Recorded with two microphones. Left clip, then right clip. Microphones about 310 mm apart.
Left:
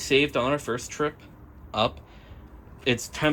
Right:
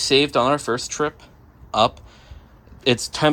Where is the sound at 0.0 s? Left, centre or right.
Centre.